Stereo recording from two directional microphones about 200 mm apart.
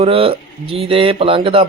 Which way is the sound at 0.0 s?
30° right (ahead or behind).